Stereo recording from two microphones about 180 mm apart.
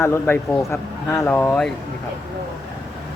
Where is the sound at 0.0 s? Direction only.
10° left (ahead or behind).